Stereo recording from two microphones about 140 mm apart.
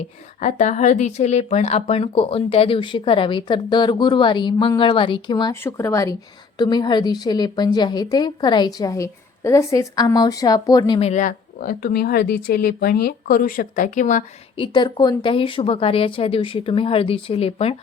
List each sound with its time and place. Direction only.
0.4 s a woman's voice: 60° left (ahead or behind); by 5.5 s 30° left (ahead or behind)
5.6 s a woman's voice: 20° left (ahead or behind)
11.0 s speech: 60° left (ahead or behind)
14.6 s a woman's voice: 35° left (ahead or behind)